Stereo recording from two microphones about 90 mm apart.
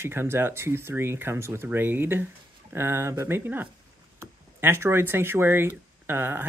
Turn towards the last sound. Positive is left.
turn(degrees=-25)  # may be behind; listen again after turning